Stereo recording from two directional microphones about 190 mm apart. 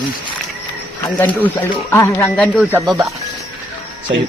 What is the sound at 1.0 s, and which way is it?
Speech, 10° left (ahead or behind).